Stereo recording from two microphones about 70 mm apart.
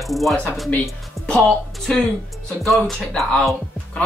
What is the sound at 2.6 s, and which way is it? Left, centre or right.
Speech, centre.